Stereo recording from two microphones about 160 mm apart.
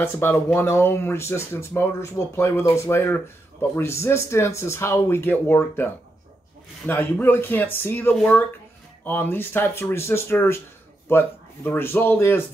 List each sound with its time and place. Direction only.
0.0 s speech: 15° left (ahead or behind)
6.9 s speech: 10° left (ahead or behind)